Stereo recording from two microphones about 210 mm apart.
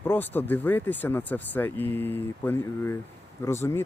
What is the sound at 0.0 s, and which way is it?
Speech, 10° left (ahead or behind).